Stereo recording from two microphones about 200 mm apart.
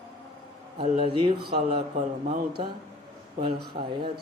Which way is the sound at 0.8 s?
30° right (ahead or behind).